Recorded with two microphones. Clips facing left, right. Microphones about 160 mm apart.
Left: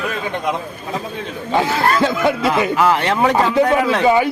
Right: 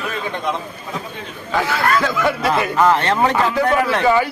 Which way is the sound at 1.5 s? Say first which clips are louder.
Left 2 dB; 25° left (ahead or behind).